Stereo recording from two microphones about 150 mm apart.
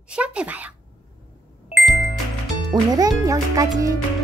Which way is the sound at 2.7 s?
25° right (ahead or behind).